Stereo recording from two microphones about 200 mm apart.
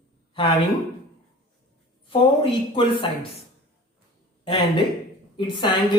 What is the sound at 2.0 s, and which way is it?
A man's voice, 25° left (ahead or behind).